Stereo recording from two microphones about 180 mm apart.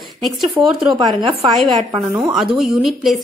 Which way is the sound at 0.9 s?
25° right (ahead or behind).